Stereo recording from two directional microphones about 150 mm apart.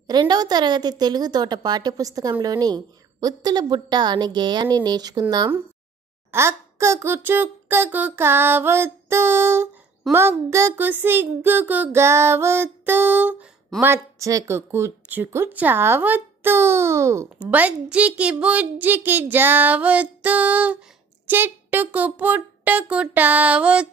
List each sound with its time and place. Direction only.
0.0 s a woman's voice: 30° right (ahead or behind)
6.3 s speech: 20° right (ahead or behind)
10.0 s a woman's voice: centre (ahead or behind)
10.5 s speech: 15° right (ahead or behind)